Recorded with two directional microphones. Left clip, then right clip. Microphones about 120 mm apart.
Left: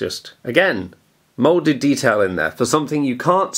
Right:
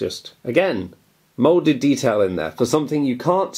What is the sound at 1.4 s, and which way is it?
Speech, 45° left (ahead or behind).